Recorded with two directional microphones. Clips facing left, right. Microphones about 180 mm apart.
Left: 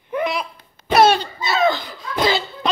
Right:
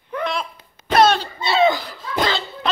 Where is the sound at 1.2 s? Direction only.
30° right (ahead or behind).